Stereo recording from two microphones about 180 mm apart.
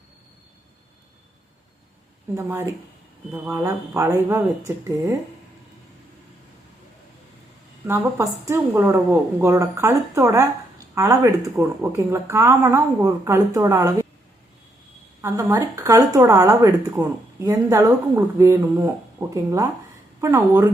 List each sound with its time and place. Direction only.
2.3 s speech: 15° right (ahead or behind)
7.9 s speech: 15° right (ahead or behind)
15.2 s speech: 15° right (ahead or behind)